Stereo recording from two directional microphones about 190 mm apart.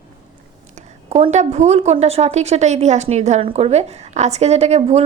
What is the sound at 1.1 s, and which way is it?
A woman's voice, 35° right (ahead or behind).